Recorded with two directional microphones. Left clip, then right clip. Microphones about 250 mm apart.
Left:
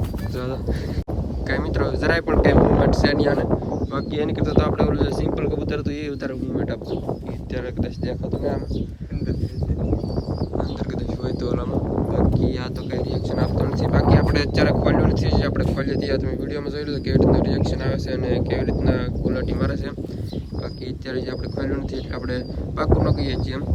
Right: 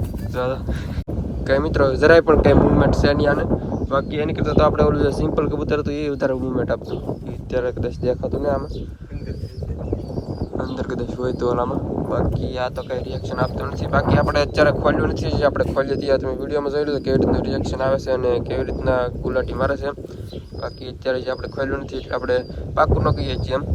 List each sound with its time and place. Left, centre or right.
0.3 s speech: centre
10.8 s speech: centre
21.1 s speech: centre